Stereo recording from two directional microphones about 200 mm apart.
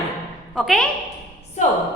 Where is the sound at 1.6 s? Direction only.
35° left (ahead or behind).